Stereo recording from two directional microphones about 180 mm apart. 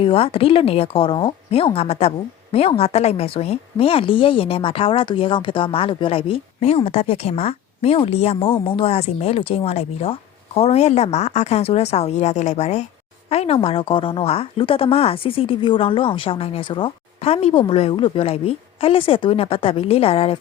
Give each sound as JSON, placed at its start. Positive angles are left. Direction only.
{"t": 0.0, "sound": "speech", "side_deg": 30}